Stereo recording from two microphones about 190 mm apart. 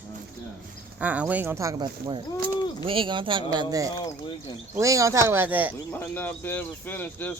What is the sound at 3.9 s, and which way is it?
Speech, 25° left (ahead or behind).